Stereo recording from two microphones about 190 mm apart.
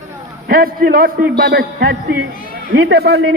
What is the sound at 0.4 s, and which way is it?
A man's voice, 50° right (ahead or behind).